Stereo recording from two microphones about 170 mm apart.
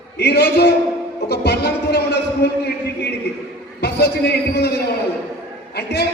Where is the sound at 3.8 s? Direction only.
75° left (ahead or behind).